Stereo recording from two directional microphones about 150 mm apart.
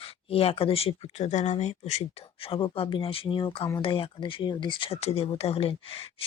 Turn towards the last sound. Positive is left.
turn(degrees=40)  # may be behind; listen again after turning